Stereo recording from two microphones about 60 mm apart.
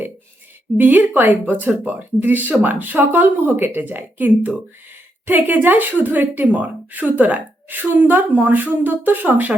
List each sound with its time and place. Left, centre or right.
0.8 s speech: right